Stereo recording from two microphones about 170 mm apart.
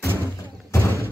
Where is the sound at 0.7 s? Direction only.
15° left (ahead or behind).